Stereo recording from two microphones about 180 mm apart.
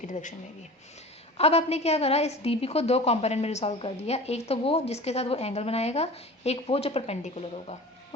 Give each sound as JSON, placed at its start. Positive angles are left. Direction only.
{"t": 0.0, "sound": "speech", "side_deg": 45}
{"t": 1.4, "sound": "a woman's voice", "side_deg": 35}